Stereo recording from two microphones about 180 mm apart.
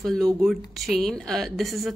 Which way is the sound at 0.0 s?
Centre (ahead or behind).